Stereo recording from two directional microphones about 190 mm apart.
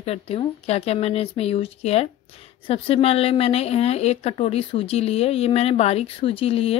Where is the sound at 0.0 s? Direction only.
30° left (ahead or behind).